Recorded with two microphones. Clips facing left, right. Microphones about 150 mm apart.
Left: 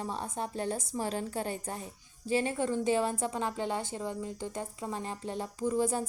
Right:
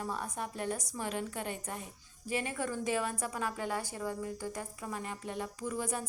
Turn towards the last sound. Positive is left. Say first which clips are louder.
# left 7 dB
turn(degrees=30)  # may be behind; listen again after turning